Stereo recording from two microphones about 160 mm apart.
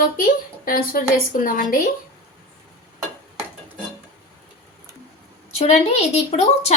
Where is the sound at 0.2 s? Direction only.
65° left (ahead or behind).